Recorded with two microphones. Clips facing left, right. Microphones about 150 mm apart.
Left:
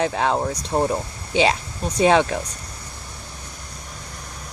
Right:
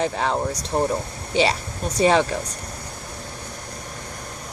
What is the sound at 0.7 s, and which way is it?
Speech, 30° left (ahead or behind).